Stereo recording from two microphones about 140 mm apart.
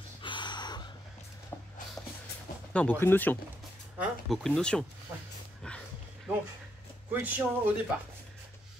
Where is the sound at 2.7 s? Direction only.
10° left (ahead or behind).